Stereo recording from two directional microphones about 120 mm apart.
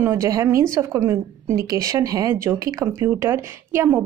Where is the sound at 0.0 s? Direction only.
20° right (ahead or behind).